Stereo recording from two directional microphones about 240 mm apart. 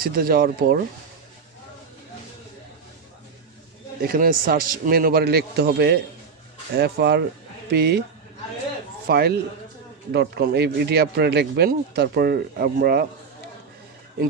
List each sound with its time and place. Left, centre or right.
0.0 s speech: right
4.0 s speech: right
9.0 s speech: right